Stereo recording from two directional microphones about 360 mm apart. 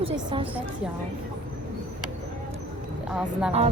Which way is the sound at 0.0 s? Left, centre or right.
Centre.